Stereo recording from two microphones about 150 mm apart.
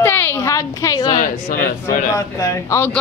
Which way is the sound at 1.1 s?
65° left (ahead or behind).